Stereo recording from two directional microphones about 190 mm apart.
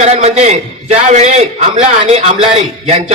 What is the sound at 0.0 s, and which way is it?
A man's voice, 35° right (ahead or behind).